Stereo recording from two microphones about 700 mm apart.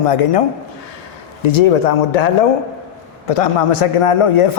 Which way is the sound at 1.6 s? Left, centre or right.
Left.